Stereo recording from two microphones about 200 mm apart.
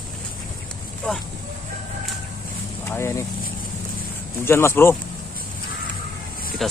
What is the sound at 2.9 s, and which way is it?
Vehicle, 15° left (ahead or behind).